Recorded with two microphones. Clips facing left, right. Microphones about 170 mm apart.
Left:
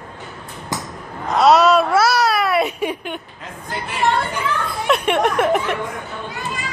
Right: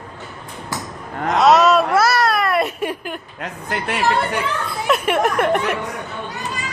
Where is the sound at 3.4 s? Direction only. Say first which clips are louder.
Right 3 dB; 70° right (ahead or behind).